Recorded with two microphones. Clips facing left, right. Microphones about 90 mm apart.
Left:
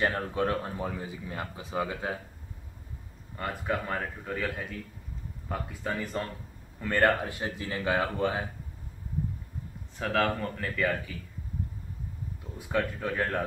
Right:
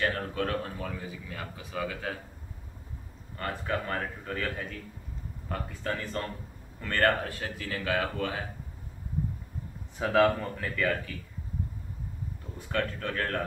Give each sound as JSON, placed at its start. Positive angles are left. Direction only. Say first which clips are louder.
{"t": 0.0, "sound": "speech", "louder": "left 2 dB", "side_deg": 25}
{"t": 3.3, "sound": "a man's voice", "louder": "left 1 dB", "side_deg": 10}
{"t": 9.9, "sound": "speech", "louder": "right 4 dB", "side_deg": -5}
{"t": 12.5, "sound": "a man's voice", "louder": "left 2 dB", "side_deg": 10}